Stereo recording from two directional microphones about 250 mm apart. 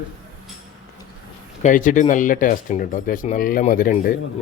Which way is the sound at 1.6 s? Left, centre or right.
Left.